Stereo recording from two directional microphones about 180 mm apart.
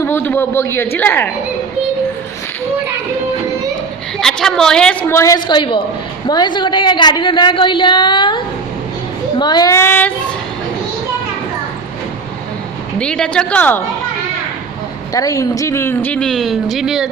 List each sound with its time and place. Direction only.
0.0 s a man's voice: 10° left (ahead or behind)
4.2 s a woman's voice: centre (ahead or behind); by 8.4 s 25° left (ahead or behind)
9.4 s speech: 25° left (ahead or behind)
13.0 s a woman's voice: 5° left (ahead or behind)
15.1 s speech: 20° left (ahead or behind); by 17.1 s 5° right (ahead or behind)